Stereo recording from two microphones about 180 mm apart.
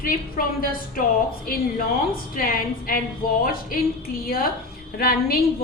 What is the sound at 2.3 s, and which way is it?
A woman's voice, 50° left (ahead or behind).